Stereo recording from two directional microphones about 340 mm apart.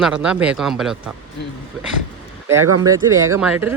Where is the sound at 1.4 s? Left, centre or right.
Left.